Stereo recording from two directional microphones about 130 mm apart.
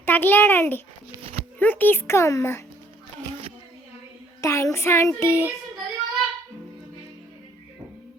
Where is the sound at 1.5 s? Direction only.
15° left (ahead or behind).